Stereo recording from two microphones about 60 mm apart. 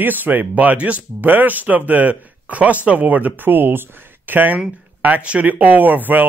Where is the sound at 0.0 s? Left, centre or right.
Right.